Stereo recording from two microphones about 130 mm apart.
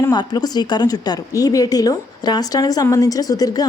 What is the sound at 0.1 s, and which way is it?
A woman's voice, 30° left (ahead or behind).